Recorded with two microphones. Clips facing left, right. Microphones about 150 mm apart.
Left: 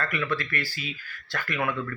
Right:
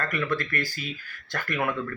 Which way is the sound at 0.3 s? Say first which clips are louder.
Right 2 dB; 45° right (ahead or behind).